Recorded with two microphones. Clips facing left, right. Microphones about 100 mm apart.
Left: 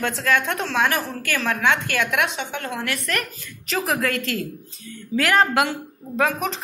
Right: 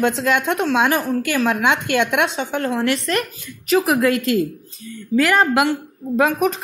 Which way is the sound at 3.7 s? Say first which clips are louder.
Right 7 dB; 10° right (ahead or behind).